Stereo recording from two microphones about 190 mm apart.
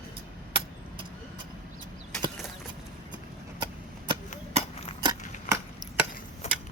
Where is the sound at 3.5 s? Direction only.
25° right (ahead or behind).